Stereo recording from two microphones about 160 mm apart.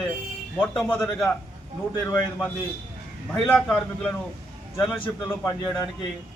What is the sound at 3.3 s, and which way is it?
A man's voice, 5° left (ahead or behind).